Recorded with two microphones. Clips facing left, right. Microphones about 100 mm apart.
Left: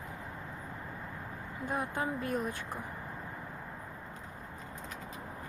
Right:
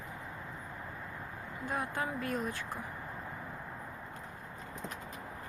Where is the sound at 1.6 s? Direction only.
25° left (ahead or behind).